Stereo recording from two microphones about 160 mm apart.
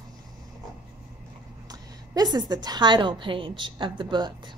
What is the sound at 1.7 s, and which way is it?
A woman's voice, 25° right (ahead or behind).